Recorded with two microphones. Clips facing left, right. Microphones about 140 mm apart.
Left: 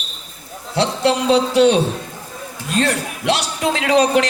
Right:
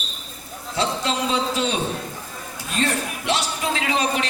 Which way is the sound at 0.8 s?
75° left (ahead or behind).